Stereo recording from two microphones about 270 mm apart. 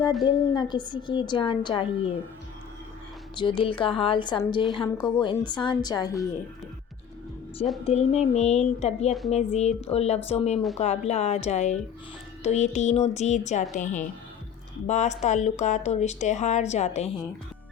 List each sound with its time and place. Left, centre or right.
0.3 s a woman's voice: centre
3.3 s a woman's voice: centre
7.9 s speech: left